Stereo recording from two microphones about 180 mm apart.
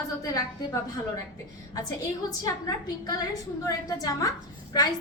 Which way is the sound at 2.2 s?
20° left (ahead or behind).